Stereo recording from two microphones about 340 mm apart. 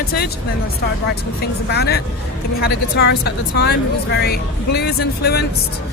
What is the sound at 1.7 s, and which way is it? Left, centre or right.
Speech, left.